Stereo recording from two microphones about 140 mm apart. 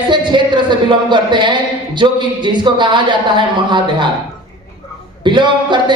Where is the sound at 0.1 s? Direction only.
35° right (ahead or behind).